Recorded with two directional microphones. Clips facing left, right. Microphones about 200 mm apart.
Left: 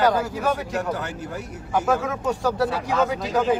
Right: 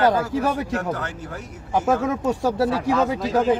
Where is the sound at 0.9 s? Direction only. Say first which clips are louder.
Left 1 dB; 10° left (ahead or behind).